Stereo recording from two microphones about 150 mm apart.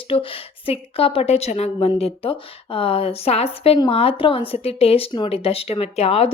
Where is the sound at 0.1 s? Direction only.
35° left (ahead or behind).